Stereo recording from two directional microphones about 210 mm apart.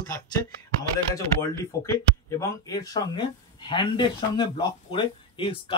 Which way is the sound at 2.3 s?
15° left (ahead or behind).